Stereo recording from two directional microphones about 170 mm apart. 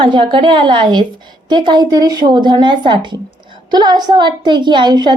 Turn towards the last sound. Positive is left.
turn(degrees=-25)  # may be behind; listen again after turning